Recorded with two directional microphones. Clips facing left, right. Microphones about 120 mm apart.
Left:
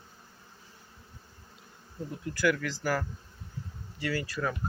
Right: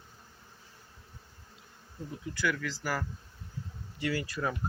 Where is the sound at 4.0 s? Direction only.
20° right (ahead or behind).